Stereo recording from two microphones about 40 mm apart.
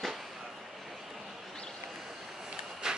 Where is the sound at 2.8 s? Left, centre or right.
Centre.